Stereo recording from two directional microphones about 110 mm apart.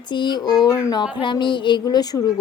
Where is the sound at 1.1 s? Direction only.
45° left (ahead or behind).